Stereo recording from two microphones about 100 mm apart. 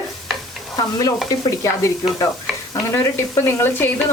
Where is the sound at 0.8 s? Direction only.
40° left (ahead or behind).